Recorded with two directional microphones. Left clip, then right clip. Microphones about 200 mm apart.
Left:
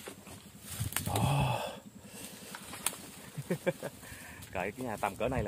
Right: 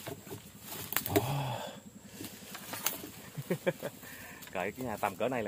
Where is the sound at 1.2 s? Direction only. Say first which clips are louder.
Left 4 dB; 45° left (ahead or behind).